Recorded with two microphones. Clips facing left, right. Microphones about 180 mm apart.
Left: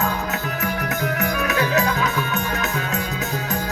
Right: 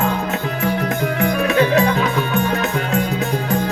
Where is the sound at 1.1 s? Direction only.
30° right (ahead or behind).